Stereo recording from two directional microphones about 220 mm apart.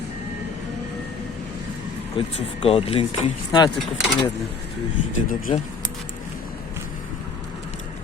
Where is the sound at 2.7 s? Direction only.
25° left (ahead or behind).